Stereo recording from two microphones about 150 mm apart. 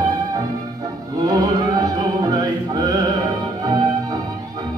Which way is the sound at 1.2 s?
25° right (ahead or behind).